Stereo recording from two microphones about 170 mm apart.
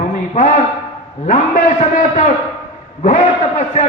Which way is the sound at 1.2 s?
45° left (ahead or behind).